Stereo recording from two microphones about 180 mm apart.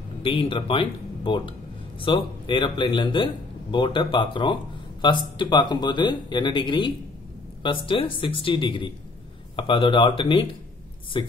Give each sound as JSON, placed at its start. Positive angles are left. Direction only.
{"t": 0.2, "sound": "speech", "side_deg": 30}